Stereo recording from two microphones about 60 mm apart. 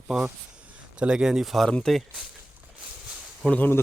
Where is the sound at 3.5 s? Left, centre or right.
Left.